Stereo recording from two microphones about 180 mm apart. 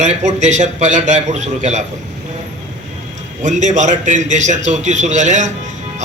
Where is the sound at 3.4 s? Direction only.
40° right (ahead or behind).